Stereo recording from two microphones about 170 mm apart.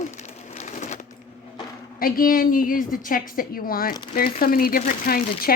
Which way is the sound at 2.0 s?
60° left (ahead or behind).